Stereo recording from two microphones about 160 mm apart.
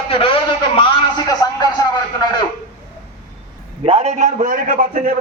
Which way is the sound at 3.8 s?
40° right (ahead or behind).